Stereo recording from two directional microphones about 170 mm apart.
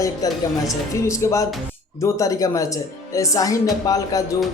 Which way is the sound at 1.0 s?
15° left (ahead or behind).